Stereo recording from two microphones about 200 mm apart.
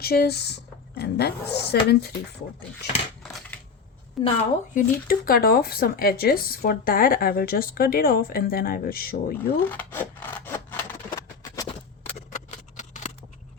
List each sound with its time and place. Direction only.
0.0 s speech: 50° left (ahead or behind)
4.2 s a woman's voice: centre (ahead or behind)
4.7 s speech: 45° left (ahead or behind)
9.7 s rub: 10° left (ahead or behind)
12.0 s a sound: 35° left (ahead or behind)